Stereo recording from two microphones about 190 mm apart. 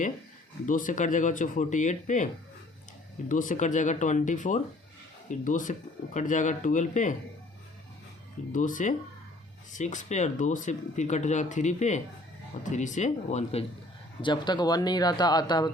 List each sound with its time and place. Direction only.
0.6 s speech: 45° left (ahead or behind)
8.5 s speech: 45° left (ahead or behind)
14.2 s speech: 25° left (ahead or behind)